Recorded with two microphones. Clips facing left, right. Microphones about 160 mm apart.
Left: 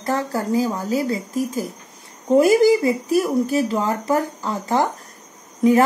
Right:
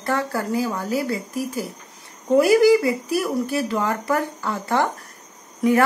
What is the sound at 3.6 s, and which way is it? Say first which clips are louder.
A woman's voice: left 2 dB; 15° left (ahead or behind).